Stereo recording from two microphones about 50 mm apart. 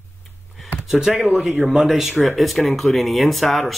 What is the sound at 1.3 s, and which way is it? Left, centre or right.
Speech, right.